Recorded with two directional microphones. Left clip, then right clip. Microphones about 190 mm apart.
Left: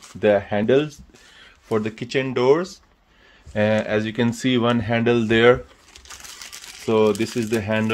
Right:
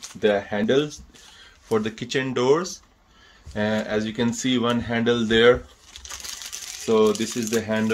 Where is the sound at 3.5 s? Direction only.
40° left (ahead or behind).